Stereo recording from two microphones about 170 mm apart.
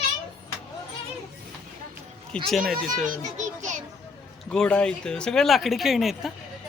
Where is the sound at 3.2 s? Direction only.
45° right (ahead or behind).